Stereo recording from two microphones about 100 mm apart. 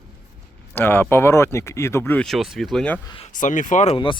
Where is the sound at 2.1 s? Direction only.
Centre (ahead or behind).